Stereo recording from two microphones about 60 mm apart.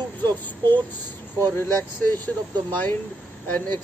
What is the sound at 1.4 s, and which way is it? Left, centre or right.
Speech, left.